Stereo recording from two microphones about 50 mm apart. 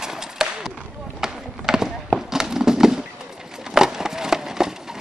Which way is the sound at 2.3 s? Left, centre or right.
Centre.